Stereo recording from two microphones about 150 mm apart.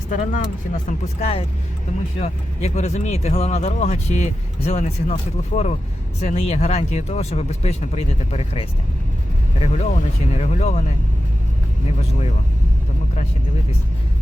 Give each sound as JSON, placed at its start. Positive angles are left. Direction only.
{"t": 0.1, "sound": "speech", "side_deg": 60}
{"t": 1.2, "sound": "speech", "side_deg": 40}